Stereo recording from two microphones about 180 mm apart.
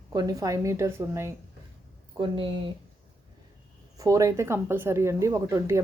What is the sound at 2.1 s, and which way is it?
Speech, 30° right (ahead or behind).